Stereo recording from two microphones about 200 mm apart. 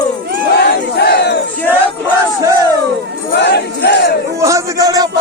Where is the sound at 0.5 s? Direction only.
55° left (ahead or behind).